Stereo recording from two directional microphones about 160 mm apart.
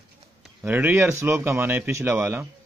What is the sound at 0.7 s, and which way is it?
Speech, 10° right (ahead or behind).